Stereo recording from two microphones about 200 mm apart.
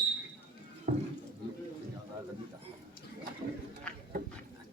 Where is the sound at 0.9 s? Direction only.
45° right (ahead or behind).